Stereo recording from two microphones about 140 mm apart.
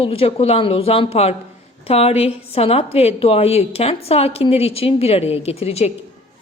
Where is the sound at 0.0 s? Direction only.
45° left (ahead or behind).